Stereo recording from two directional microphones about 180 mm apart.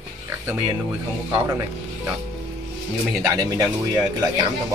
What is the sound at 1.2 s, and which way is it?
Speech, 15° right (ahead or behind).